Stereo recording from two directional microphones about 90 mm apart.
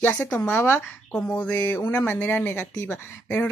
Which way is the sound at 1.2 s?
15° left (ahead or behind).